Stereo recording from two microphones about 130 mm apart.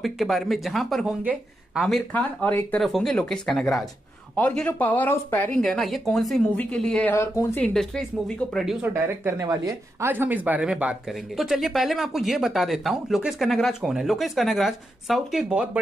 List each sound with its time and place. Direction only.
0.0 s speech: centre (ahead or behind); by 5.6 s 15° left (ahead or behind)
5.6 s speech: centre (ahead or behind)
7.2 s speech: 20° left (ahead or behind)
7.6 s speech: 5° left (ahead or behind)
8.9 s speech: 20° right (ahead or behind)